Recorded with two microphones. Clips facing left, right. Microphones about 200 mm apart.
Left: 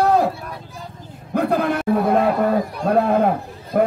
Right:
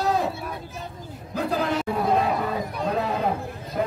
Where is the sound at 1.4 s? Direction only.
60° left (ahead or behind).